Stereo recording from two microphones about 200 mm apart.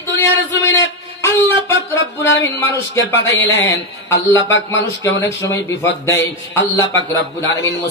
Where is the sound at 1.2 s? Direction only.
10° left (ahead or behind).